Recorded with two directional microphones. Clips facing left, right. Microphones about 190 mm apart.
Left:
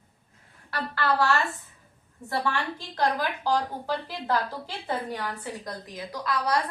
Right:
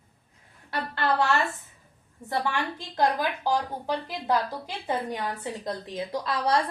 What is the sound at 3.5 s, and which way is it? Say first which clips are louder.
A woman's voice: left 1 dB; 15° right (ahead or behind).